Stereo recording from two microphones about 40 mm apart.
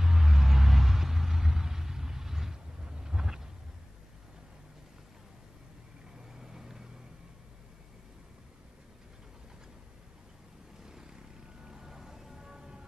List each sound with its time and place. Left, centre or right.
0.0 s vehicle: centre
6.3 s vehicle: centre
10.9 s vehicle: centre
11.6 s music: centre